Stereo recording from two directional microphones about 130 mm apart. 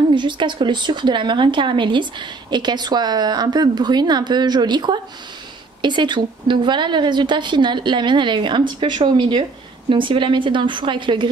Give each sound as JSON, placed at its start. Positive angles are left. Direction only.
{"t": 0.1, "sound": "speech", "side_deg": -35}